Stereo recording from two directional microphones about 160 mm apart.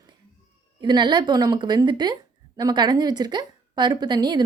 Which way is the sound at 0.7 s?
25° right (ahead or behind).